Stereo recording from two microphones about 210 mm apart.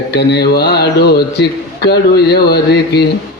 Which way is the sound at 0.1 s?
50° left (ahead or behind).